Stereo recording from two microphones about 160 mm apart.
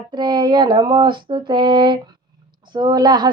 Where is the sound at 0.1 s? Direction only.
25° right (ahead or behind).